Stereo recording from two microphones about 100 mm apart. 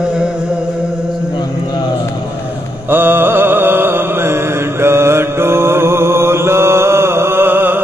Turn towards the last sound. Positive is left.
turn(degrees=-20)  # may be behind; listen again after turning